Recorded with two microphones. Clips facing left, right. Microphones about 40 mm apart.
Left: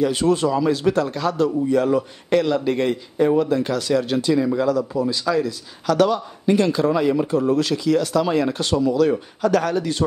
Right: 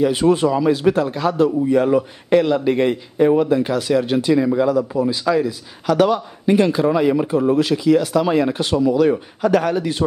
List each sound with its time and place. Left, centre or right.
0.0 s a man's voice: centre